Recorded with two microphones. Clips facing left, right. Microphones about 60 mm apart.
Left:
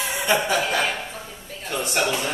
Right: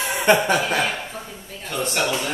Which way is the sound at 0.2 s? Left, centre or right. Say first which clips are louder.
Right 5 dB; right.